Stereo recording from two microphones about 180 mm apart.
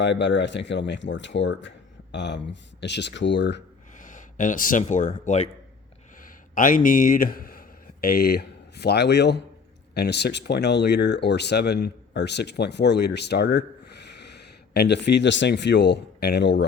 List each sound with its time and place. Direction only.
0.0 s speech: 75° left (ahead or behind)
2.1 s speech: 75° left (ahead or behind)
3.9 s a sound: 45° left (ahead or behind)
4.8 s speech: 40° left (ahead or behind); by 16.6 s 70° left (ahead or behind)